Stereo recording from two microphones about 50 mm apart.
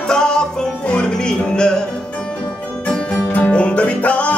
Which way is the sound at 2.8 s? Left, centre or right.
Left.